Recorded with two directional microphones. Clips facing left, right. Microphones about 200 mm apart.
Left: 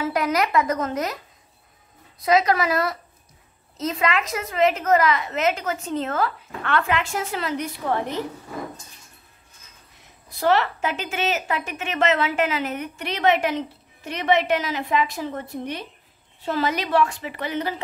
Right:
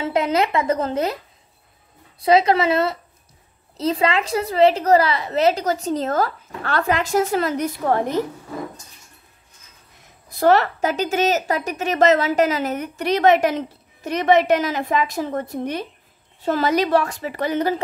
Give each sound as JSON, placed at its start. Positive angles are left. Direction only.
{"t": 0.0, "sound": "speech", "side_deg": -25}
{"t": 2.1, "sound": "a woman's voice", "side_deg": -30}
{"t": 10.4, "sound": "a woman's voice", "side_deg": -45}